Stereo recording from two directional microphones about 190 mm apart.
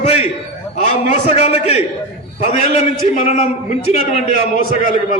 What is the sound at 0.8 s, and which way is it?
A man's voice, 40° left (ahead or behind).